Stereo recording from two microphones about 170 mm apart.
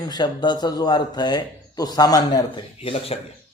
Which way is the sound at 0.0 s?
25° left (ahead or behind).